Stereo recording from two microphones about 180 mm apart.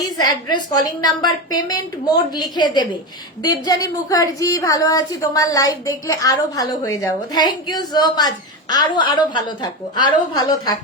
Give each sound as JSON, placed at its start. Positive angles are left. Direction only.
{"t": 0.2, "sound": "a woman's voice", "side_deg": 25}